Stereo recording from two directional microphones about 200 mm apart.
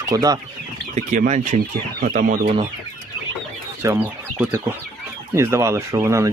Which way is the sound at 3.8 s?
15° right (ahead or behind).